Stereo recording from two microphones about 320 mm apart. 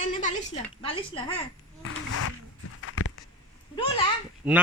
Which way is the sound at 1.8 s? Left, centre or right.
Left.